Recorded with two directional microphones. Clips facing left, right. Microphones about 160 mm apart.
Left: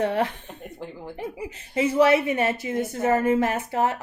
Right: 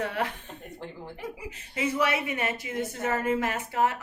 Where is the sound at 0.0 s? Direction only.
30° left (ahead or behind).